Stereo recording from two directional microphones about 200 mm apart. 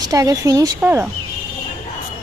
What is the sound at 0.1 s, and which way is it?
Speech, 15° right (ahead or behind).